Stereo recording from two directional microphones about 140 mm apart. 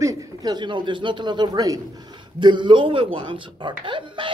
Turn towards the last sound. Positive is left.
turn(degrees=-35)  # may be behind; listen again after turning